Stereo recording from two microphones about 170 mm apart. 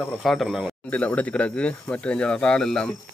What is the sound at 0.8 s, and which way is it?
Speech, 10° left (ahead or behind).